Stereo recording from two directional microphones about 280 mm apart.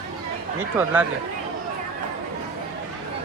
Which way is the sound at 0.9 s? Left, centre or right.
Centre.